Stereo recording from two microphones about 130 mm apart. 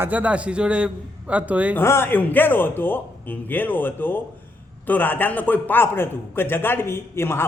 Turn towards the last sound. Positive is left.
turn(degrees=20)  # may be behind; listen again after turning